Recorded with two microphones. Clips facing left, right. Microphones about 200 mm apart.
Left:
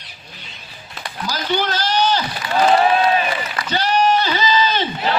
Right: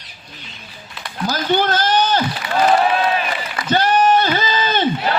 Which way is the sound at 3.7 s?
50° right (ahead or behind).